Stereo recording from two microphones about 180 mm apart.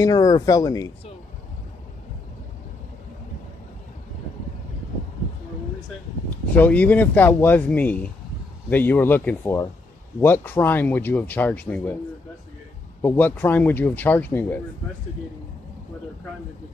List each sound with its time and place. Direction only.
0.0 s speech: 20° left (ahead or behind)
6.5 s speech: 10° left (ahead or behind)
13.0 s speech: 10° left (ahead or behind)